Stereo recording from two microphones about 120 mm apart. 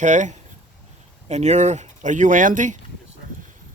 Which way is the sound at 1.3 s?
70° right (ahead or behind).